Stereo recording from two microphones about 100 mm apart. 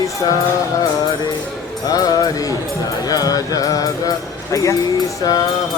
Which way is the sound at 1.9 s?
35° left (ahead or behind).